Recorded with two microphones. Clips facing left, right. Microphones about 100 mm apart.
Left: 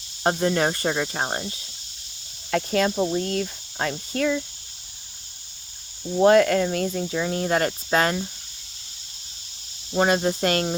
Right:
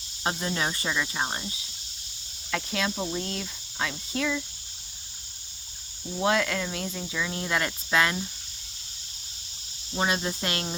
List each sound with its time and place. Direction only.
0.2 s speech: 45° left (ahead or behind)
6.1 s speech: 50° left (ahead or behind)
9.9 s speech: 45° left (ahead or behind)